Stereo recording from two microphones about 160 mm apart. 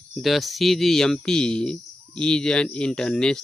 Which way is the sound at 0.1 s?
Centre (ahead or behind).